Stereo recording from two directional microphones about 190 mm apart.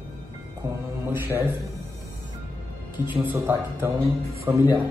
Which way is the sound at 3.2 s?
10° right (ahead or behind).